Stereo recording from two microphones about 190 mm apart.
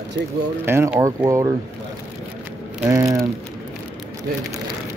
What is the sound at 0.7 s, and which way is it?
Speech, 15° right (ahead or behind).